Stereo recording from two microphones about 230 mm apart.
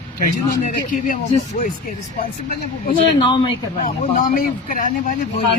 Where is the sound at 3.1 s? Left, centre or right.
Left.